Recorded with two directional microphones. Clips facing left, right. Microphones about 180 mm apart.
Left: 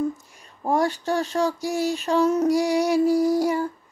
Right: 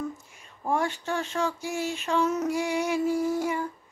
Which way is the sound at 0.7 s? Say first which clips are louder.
Left 5 dB; 35° left (ahead or behind).